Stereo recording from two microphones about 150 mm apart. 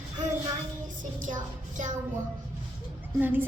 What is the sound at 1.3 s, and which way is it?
Child singing, 60° right (ahead or behind).